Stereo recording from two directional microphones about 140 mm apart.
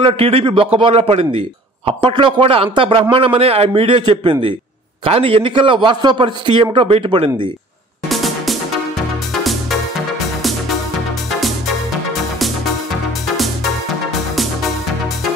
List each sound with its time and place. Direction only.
0.0 s a man's voice: 40° right (ahead or behind)
8.1 s music: centre (ahead or behind)